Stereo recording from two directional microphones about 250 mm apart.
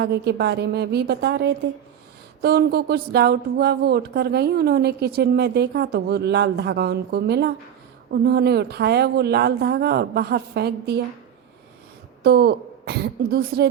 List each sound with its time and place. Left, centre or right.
0.0 s speech: right
12.2 s speech: right